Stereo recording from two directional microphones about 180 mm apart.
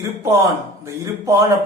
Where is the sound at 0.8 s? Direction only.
15° right (ahead or behind).